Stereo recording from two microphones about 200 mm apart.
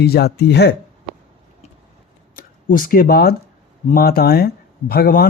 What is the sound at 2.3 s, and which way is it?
Speech, 45° left (ahead or behind).